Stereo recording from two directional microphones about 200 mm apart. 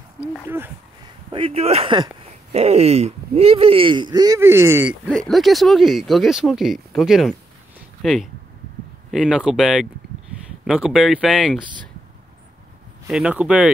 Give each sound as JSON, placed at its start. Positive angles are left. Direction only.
{"t": 0.3, "sound": "speech", "side_deg": -10}
{"t": 1.3, "sound": "speech", "side_deg": -30}
{"t": 5.0, "sound": "speech", "side_deg": 5}
{"t": 13.1, "sound": "speech", "side_deg": -5}